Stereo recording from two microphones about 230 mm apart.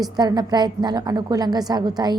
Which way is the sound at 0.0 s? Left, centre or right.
Centre.